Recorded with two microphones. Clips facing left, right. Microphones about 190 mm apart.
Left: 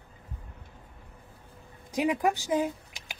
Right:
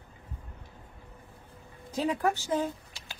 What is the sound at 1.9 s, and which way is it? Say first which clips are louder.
Speech: left 2 dB; 15° left (ahead or behind).